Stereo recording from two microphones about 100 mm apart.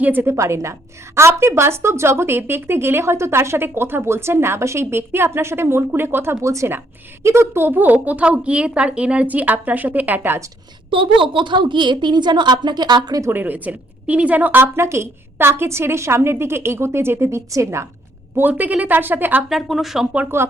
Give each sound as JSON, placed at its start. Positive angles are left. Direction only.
{"t": 0.0, "sound": "a woman's voice", "side_deg": -20}
{"t": 10.9, "sound": "a woman's voice", "side_deg": -60}
{"t": 13.2, "sound": "a woman's voice", "side_deg": -20}
{"t": 18.3, "sound": "a woman's voice", "side_deg": -20}
{"t": 19.5, "sound": "speech", "side_deg": 0}
{"t": 20.1, "sound": "a woman's voice", "side_deg": -25}